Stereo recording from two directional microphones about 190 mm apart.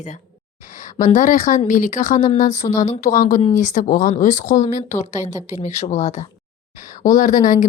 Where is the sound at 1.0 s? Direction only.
40° left (ahead or behind).